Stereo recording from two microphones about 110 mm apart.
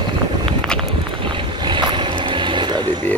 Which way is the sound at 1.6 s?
45° right (ahead or behind).